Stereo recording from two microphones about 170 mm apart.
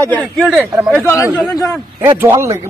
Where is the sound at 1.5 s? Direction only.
20° left (ahead or behind).